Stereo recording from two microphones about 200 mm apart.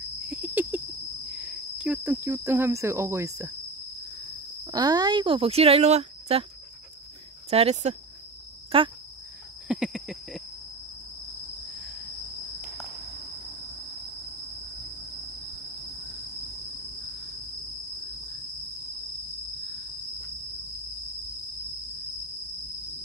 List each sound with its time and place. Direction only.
0.3 s cricket: 5° right (ahead or behind)
1.3 s insect: 5° right (ahead or behind)
4.6 s speech: 20° right (ahead or behind)
7.4 s speech: 30° right (ahead or behind)
9.7 s cricket: 5° right (ahead or behind)